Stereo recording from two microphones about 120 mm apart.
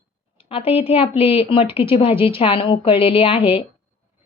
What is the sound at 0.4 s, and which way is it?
A woman's voice, 50° left (ahead or behind).